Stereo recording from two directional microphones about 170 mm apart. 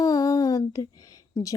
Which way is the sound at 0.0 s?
20° left (ahead or behind).